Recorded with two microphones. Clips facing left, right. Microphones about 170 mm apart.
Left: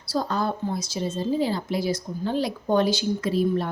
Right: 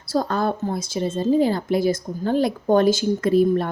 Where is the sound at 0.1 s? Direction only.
50° right (ahead or behind).